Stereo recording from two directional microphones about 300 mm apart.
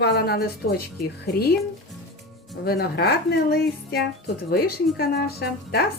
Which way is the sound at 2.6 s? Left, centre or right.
Left.